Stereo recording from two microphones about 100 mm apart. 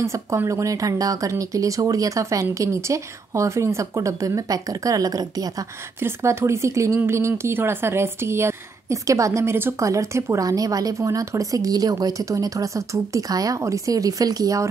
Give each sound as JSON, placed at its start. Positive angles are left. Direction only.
{"t": 0.0, "sound": "speech", "side_deg": -30}
{"t": 5.9, "sound": "speech", "side_deg": -25}